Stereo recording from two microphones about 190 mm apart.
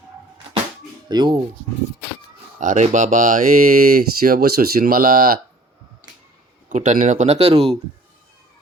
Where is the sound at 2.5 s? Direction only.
40° right (ahead or behind).